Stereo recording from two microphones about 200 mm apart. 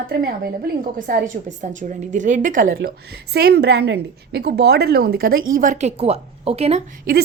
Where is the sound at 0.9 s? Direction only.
45° right (ahead or behind).